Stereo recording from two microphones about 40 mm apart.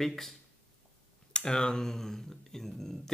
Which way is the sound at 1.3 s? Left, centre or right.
Centre.